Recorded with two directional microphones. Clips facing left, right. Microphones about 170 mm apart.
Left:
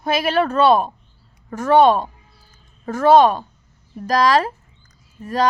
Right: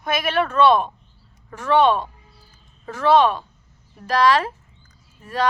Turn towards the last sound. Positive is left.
turn(degrees=40)  # may be behind; listen again after turning